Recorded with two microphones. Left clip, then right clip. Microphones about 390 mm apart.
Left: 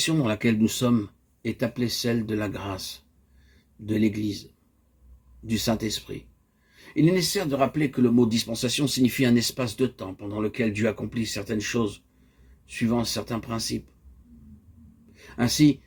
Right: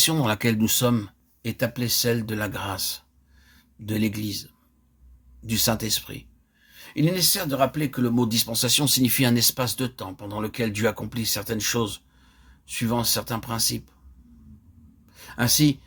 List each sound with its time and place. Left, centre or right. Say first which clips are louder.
0.0 s speech: right 2 dB; right
5.5 s speech: right 2 dB; right
15.1 s a sound: right 3 dB; right